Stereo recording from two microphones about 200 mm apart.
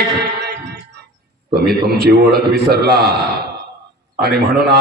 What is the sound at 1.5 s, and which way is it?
A man's voice, 50° right (ahead or behind).